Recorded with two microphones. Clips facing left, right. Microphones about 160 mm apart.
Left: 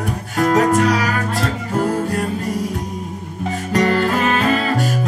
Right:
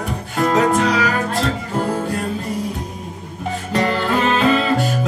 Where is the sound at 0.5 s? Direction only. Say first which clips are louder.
Left 1 dB; 45° left (ahead or behind).